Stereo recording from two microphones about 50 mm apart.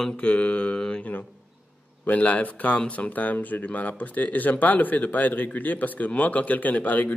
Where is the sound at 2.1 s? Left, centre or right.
Left.